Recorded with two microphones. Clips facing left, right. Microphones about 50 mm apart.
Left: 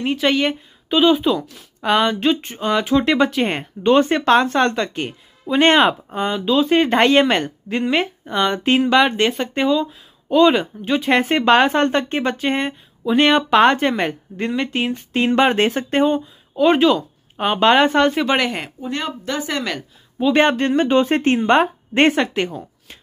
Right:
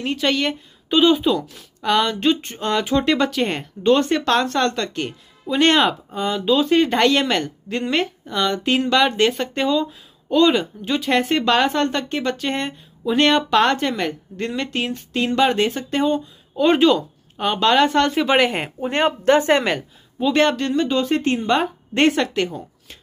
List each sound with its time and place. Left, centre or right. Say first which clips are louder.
0.0 s a woman's voice: left 3 dB; centre
1.8 s speech: left 2 dB; centre
6.3 s a woman's voice: even; centre
6.7 s speech: left 4 dB; left; by 8.1 s centre
8.3 s speech: left 3 dB; left
8.7 s speech: left 2 dB; centre
13.5 s speech: left 3 dB; left
15.1 s speech: left 2 dB; left
16.5 s a woman's voice: left 1 dB; centre
17.4 s speech: left 2 dB; left
18.1 s a woman's voice: right 2 dB; centre
18.8 s speech: right 6 dB; right
20.3 s speech: left 2 dB; left
22.1 s speech: left 1 dB; centre